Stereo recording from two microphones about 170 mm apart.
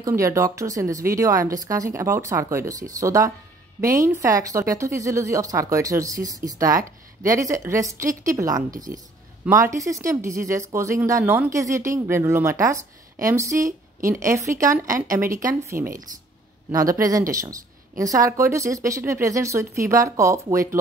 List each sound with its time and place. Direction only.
0.0 s speech: 15° right (ahead or behind)
8.7 s speech: 50° right (ahead or behind)
9.4 s speech: 20° right (ahead or behind)